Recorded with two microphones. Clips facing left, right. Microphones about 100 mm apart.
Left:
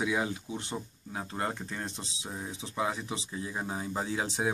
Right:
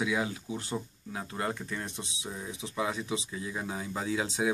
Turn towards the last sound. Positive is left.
turn(degrees=30)  # may be behind; listen again after turning